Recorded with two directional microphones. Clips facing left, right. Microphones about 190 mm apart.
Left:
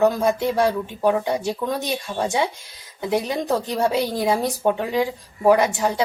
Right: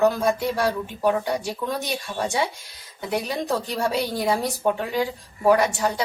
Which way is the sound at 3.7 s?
20° left (ahead or behind).